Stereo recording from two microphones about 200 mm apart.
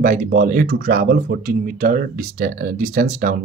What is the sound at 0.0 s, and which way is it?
Speech, 40° right (ahead or behind).